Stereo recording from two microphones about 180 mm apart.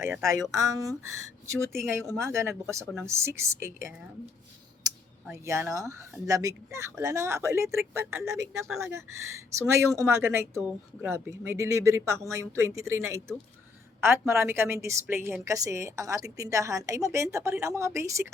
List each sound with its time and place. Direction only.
0.0 s a woman's voice: 15° right (ahead or behind)
2.0 s a woman's voice: 15° right (ahead or behind)
2.8 s speech: centre (ahead or behind)
3.1 s a woman's voice: 15° right (ahead or behind)
4.9 s a sound: 20° right (ahead or behind)
5.5 s a woman's voice: 15° right (ahead or behind)